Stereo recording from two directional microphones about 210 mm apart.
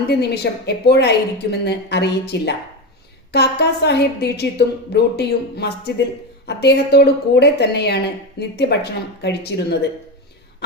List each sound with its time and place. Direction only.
0.1 s a woman's voice: 50° left (ahead or behind)